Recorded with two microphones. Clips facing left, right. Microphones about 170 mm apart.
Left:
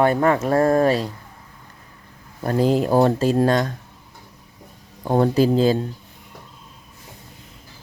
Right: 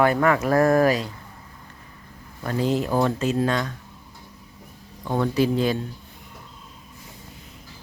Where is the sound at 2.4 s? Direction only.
40° left (ahead or behind).